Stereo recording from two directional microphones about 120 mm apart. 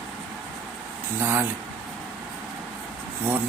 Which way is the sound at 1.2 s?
20° right (ahead or behind).